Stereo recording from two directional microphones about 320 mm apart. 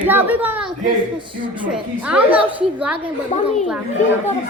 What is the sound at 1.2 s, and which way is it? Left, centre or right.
Speech, centre.